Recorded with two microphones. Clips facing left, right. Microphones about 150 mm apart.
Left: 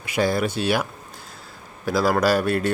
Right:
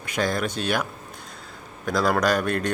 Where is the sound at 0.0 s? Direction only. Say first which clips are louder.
Left 3 dB; 10° left (ahead or behind).